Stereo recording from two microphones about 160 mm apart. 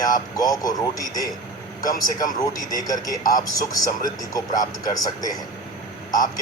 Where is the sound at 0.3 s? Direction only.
25° left (ahead or behind).